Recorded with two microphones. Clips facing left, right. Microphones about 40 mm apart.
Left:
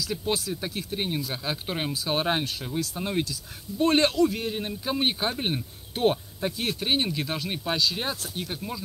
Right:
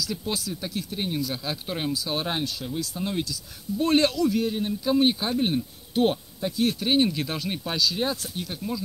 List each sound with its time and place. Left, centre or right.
0.0 s speech: left
6.9 s speech: centre
7.7 s speech: left